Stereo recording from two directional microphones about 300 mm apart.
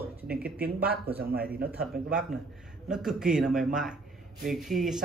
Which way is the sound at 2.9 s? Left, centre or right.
Centre.